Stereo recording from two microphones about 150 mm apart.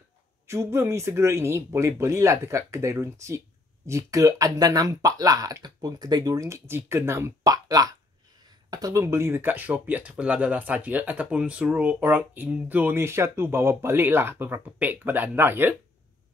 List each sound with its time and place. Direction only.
0.5 s speech: 15° right (ahead or behind)